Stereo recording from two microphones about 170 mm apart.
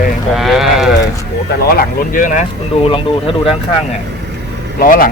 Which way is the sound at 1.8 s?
50° left (ahead or behind).